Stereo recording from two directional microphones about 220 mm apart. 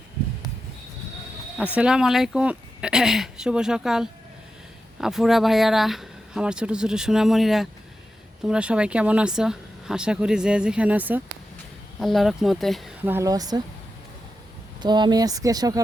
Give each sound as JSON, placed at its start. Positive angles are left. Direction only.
{"t": 1.5, "sound": "speech", "side_deg": -5}
{"t": 13.1, "sound": "speech", "side_deg": -15}
{"t": 14.8, "sound": "speech", "side_deg": -20}